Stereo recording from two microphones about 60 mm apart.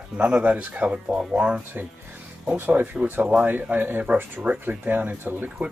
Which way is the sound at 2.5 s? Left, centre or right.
Right.